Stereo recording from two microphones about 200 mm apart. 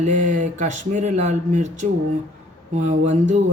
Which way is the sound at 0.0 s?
40° right (ahead or behind).